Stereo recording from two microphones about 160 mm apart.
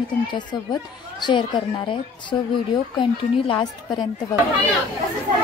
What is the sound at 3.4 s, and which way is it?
Speech, 30° left (ahead or behind).